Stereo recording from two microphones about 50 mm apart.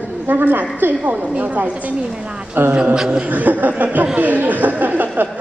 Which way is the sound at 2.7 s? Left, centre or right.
Centre.